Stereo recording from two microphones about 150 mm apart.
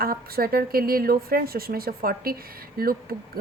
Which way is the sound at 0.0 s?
80° right.